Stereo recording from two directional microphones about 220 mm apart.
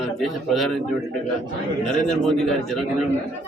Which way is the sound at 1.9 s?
Centre (ahead or behind).